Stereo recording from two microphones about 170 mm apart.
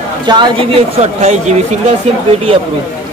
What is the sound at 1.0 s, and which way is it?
Speech, 40° right (ahead or behind).